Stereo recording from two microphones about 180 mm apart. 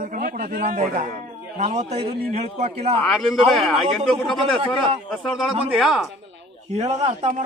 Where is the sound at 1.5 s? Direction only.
35° right (ahead or behind).